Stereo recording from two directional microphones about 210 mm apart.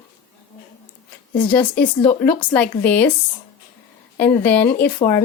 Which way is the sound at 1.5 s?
5° left (ahead or behind).